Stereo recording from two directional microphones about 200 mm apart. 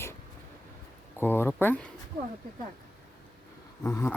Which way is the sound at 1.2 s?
10° left (ahead or behind).